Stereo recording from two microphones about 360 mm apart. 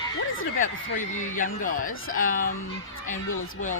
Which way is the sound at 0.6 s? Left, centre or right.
Left.